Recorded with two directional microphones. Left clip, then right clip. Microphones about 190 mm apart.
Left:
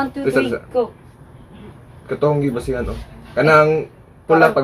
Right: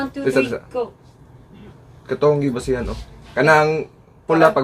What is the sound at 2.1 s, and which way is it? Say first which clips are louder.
Speech: right 1 dB; 55° right (ahead or behind).